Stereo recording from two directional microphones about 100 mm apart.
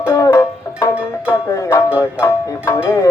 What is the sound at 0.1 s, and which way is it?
Music, 35° left (ahead or behind).